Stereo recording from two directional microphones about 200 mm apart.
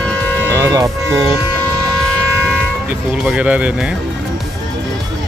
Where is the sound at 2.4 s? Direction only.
5° right (ahead or behind).